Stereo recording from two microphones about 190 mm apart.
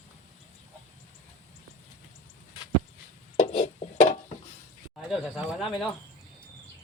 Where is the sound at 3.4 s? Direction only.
35° left (ahead or behind).